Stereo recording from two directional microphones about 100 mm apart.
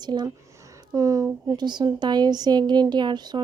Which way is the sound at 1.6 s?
45° right (ahead or behind).